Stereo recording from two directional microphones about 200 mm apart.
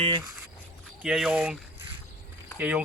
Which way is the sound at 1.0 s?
5° right (ahead or behind).